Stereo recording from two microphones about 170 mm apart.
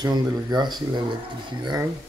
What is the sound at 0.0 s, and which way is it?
Speech, 25° right (ahead or behind).